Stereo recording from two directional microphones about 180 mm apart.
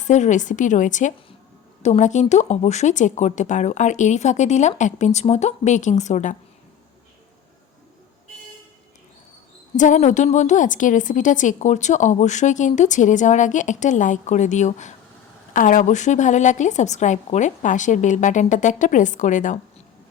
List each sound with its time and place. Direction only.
0.0 s a woman's voice: 40° left (ahead or behind)
9.7 s a woman's voice: 45° left (ahead or behind)